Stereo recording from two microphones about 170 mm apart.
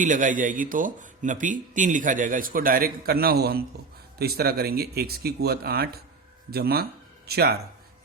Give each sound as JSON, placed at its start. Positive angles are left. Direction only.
{"t": 0.0, "sound": "speech", "side_deg": -50}